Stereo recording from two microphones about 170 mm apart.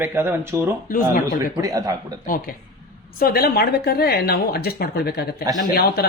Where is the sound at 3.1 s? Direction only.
60° left (ahead or behind).